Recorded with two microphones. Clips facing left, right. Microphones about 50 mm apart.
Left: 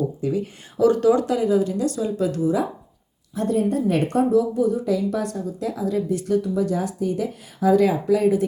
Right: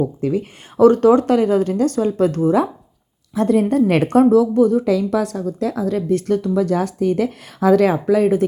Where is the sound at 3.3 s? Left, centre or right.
Right.